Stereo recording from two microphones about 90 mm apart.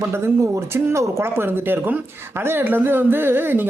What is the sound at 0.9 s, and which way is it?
A woman's voice, 30° right (ahead or behind).